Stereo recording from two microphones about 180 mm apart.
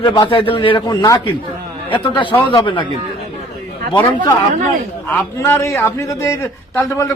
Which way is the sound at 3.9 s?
25° left (ahead or behind).